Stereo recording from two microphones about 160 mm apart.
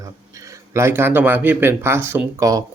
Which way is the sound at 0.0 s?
20° right (ahead or behind).